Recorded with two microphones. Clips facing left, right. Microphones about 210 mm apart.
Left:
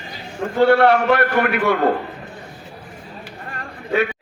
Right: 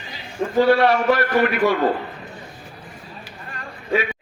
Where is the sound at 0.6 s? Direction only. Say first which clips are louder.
Left 2 dB; 60° left (ahead or behind).